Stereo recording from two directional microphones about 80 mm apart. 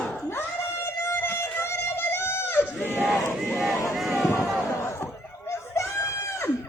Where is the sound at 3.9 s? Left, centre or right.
Centre.